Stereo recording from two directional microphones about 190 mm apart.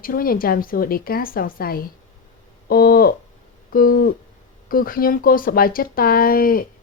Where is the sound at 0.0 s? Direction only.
50° left (ahead or behind).